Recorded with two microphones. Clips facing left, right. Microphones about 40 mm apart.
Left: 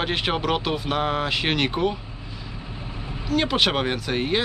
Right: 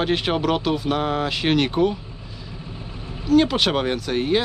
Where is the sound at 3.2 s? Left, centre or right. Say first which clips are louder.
Right 4 dB; centre.